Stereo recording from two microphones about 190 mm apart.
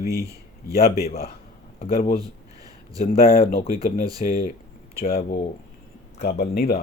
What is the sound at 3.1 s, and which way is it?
Speech, 50° left (ahead or behind).